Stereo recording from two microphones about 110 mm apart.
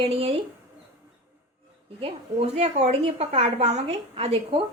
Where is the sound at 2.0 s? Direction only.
60° right (ahead or behind).